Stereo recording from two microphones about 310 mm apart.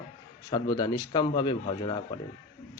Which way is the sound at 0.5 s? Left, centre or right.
Centre.